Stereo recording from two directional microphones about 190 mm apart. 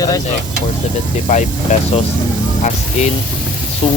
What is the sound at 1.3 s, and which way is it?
Speech, 40° left (ahead or behind).